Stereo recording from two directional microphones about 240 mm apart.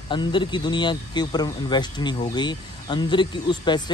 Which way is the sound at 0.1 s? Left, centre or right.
Centre.